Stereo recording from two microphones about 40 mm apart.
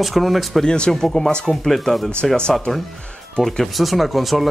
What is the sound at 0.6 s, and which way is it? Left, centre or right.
Speech, left.